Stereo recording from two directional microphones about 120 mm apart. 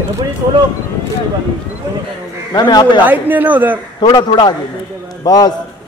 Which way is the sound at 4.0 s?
35° left (ahead or behind).